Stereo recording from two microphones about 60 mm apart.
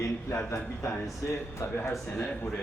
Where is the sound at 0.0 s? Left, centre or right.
Left.